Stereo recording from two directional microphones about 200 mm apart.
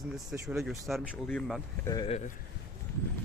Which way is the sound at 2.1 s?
35° left (ahead or behind).